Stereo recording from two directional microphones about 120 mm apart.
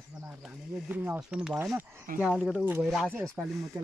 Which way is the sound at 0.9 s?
15° right (ahead or behind).